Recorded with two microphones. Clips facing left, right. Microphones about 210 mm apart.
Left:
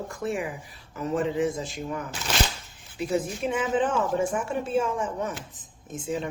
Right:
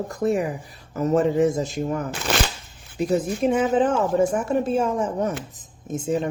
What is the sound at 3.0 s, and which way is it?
Speech, 40° right (ahead or behind).